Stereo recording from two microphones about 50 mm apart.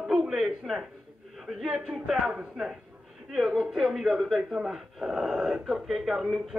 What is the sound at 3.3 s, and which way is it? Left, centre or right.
Speech, centre.